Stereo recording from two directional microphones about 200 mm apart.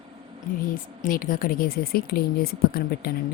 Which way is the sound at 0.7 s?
45° left (ahead or behind).